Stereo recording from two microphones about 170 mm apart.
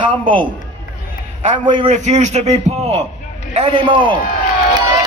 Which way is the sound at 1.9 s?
45° right (ahead or behind).